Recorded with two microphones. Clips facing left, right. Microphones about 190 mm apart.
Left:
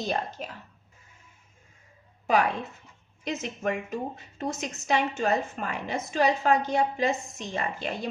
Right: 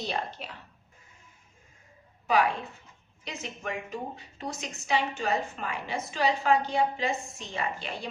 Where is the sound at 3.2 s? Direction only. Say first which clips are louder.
Left 7 dB; 45° left (ahead or behind).